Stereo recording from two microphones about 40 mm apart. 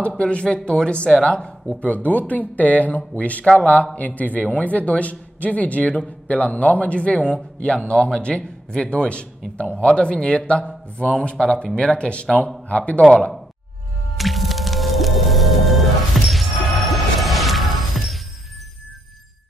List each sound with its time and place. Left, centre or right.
0.2 s speech: left
1.1 s a woman's voice: centre
1.8 s speech: left
14.1 s music: centre